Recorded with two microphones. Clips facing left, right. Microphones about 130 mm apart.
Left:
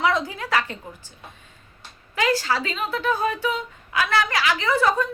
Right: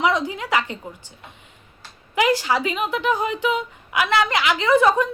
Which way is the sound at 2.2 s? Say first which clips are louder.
Right 2 dB; 15° right (ahead or behind).